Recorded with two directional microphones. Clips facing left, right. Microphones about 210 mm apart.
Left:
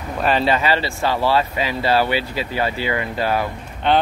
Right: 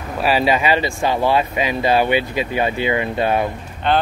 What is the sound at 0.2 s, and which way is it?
Speech, 10° right (ahead or behind).